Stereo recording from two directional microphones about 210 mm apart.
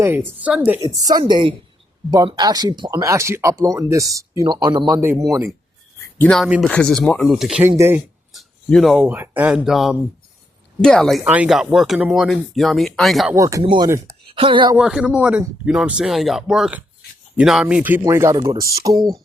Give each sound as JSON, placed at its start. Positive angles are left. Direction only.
{"t": 0.0, "sound": "speech", "side_deg": -10}
{"t": 6.1, "sound": "speech", "side_deg": 5}
{"t": 8.3, "sound": "speech", "side_deg": 0}
{"t": 13.3, "sound": "speech", "side_deg": -15}
{"t": 14.8, "sound": "speech", "side_deg": -5}